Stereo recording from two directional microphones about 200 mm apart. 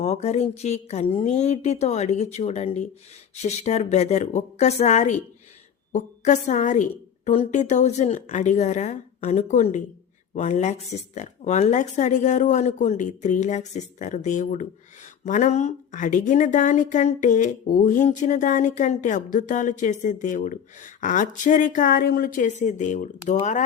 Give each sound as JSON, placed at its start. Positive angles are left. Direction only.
{"t": 0.0, "sound": "a woman's voice", "side_deg": 35}